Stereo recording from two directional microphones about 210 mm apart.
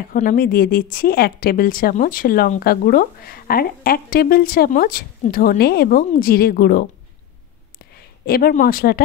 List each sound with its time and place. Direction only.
0.1 s a woman's voice: 40° left (ahead or behind)